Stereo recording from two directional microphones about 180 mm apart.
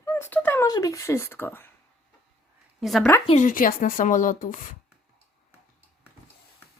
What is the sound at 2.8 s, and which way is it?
Speech, centre (ahead or behind).